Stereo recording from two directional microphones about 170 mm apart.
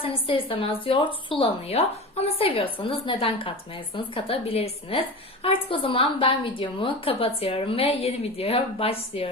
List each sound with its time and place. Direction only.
0.0 s a woman's voice: 30° left (ahead or behind)